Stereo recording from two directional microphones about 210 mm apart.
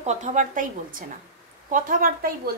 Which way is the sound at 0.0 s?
35° right (ahead or behind).